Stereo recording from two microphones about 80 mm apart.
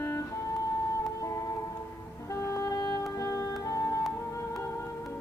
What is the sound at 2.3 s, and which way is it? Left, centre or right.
Music, left.